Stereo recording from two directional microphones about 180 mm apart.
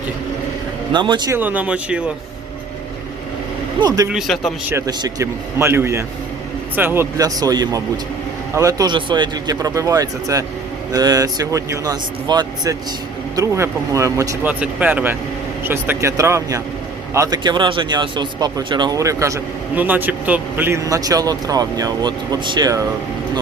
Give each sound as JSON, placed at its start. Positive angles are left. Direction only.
{"t": 0.9, "sound": "speech", "side_deg": -25}
{"t": 1.4, "sound": "speech", "side_deg": -10}
{"t": 3.8, "sound": "speech", "side_deg": -20}
{"t": 4.1, "sound": "speech", "side_deg": 0}
{"t": 4.7, "sound": "speech", "side_deg": -20}